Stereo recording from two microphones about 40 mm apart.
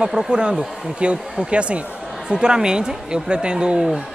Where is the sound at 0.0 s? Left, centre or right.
Centre.